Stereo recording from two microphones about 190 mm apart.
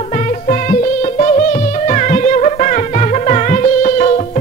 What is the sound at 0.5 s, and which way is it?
Music, 40° left (ahead or behind).